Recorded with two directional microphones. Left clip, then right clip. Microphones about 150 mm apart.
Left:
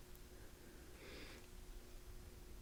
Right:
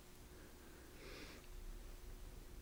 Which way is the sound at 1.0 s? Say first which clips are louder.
Right 1 dB; 15° right (ahead or behind).